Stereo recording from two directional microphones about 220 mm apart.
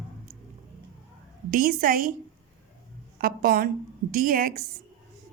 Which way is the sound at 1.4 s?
40° right (ahead or behind).